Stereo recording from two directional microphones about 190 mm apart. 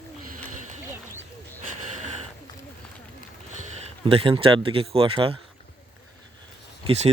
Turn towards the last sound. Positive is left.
turn(degrees=-35)  # may be behind; listen again after turning